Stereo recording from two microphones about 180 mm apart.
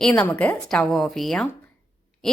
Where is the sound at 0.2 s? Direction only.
10° left (ahead or behind).